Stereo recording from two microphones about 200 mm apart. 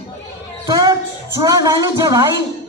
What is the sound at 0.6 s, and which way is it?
Speech, 20° right (ahead or behind).